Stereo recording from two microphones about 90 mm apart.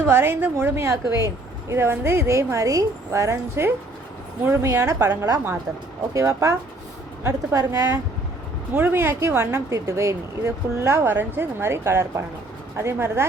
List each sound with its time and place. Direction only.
0.0 s a woman's voice: 25° right (ahead or behind)
4.7 s speech: 40° right (ahead or behind)
8.7 s a woman's voice: 20° right (ahead or behind)